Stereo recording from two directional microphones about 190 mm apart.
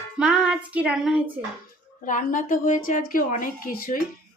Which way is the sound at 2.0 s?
45° left (ahead or behind).